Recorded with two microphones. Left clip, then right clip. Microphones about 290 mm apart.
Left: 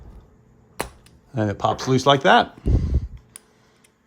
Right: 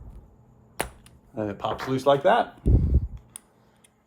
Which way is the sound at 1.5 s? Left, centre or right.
Left.